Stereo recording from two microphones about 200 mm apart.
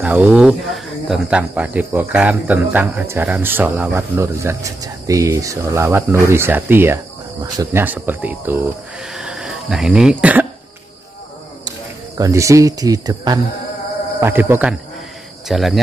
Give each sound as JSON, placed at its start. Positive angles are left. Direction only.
{"t": 0.0, "sound": "speech", "side_deg": -5}
{"t": 9.0, "sound": "a sound", "side_deg": -5}
{"t": 12.2, "sound": "speech", "side_deg": -15}
{"t": 15.4, "sound": "cricket", "side_deg": 0}